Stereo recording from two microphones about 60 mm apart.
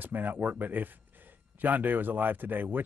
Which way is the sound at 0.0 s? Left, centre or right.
Right.